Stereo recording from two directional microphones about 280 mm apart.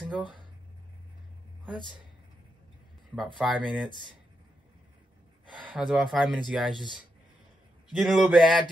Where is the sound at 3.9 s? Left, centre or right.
Centre.